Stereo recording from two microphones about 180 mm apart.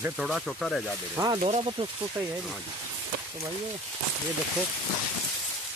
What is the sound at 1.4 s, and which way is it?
Speech, 35° right (ahead or behind).